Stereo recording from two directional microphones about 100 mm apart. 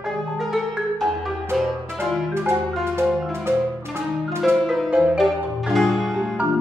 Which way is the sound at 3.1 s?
Centre (ahead or behind).